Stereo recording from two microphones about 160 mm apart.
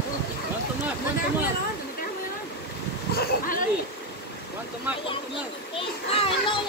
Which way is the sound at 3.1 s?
65° left (ahead or behind).